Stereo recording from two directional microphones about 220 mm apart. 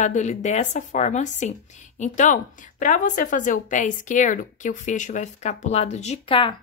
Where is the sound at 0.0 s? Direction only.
30° left (ahead or behind).